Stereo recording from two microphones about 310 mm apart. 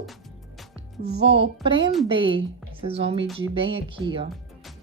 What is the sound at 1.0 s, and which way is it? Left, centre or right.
A woman's voice, right.